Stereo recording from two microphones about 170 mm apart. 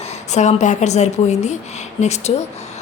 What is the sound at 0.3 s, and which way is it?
A woman's voice, 45° left (ahead or behind).